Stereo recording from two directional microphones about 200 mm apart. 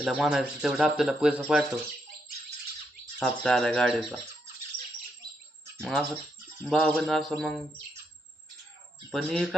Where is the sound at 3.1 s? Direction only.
Centre (ahead or behind).